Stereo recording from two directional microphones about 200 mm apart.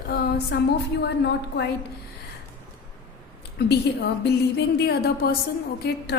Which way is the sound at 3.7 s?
55° left (ahead or behind).